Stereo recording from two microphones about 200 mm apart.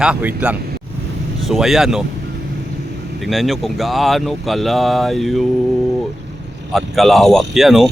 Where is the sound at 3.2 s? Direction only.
Centre (ahead or behind).